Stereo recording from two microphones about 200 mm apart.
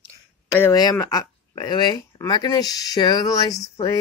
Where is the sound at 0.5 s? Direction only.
15° left (ahead or behind).